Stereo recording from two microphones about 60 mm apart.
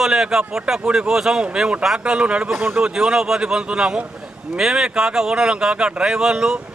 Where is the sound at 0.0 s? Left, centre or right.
Centre.